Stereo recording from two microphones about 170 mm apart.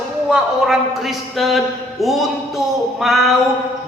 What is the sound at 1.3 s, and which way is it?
A man's voice, centre (ahead or behind).